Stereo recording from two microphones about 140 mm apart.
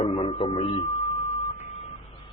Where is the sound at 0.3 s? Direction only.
40° left (ahead or behind).